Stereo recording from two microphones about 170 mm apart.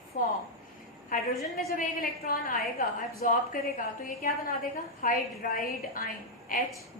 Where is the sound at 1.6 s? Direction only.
55° left (ahead or behind).